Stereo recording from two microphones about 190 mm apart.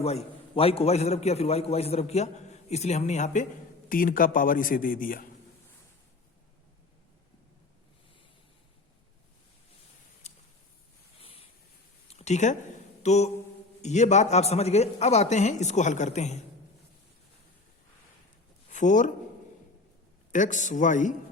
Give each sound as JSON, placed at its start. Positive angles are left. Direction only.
{"t": 0.0, "sound": "a man's voice", "side_deg": 35}
{"t": 11.2, "sound": "a sound", "side_deg": 30}
{"t": 13.0, "sound": "mantra", "side_deg": 35}
{"t": 13.8, "sound": "a man's voice", "side_deg": 35}
{"t": 18.7, "sound": "speech", "side_deg": 40}
{"t": 20.3, "sound": "a man's voice", "side_deg": 40}